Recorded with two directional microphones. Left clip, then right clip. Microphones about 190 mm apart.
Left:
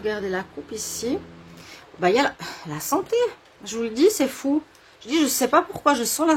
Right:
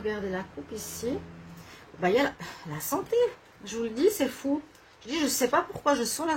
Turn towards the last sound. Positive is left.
turn(degrees=25)  # may be behind; listen again after turning